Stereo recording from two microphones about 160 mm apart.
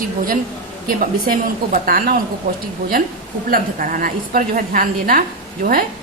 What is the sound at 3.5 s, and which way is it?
A woman's voice, 60° right (ahead or behind).